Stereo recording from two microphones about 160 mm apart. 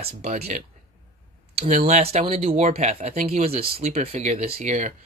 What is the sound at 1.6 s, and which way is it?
Speech, 45° right (ahead or behind).